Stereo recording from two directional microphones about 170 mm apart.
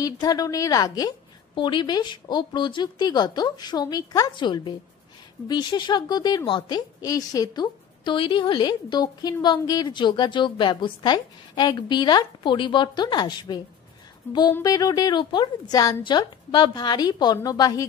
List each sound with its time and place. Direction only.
0.0 s a woman's voice: 20° left (ahead or behind)